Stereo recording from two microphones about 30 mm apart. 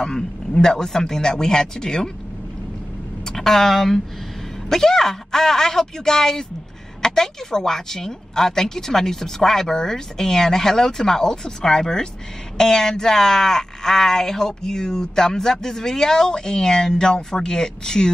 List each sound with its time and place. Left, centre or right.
0.5 s speech: left
3.3 s a woman's voice: centre